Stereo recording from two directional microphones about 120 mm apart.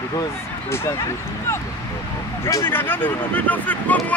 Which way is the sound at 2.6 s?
15° left (ahead or behind).